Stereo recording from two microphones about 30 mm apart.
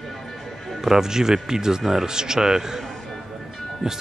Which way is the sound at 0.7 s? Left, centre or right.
Centre.